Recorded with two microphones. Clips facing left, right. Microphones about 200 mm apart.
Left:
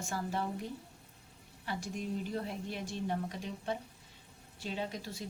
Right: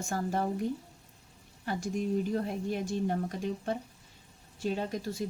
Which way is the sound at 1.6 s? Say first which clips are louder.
Right 6 dB; 45° right (ahead or behind).